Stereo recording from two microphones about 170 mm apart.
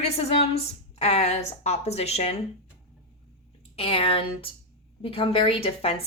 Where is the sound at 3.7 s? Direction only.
35° left (ahead or behind).